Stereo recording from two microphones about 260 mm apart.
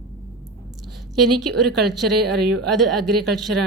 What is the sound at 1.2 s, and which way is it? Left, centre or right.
Speech, right.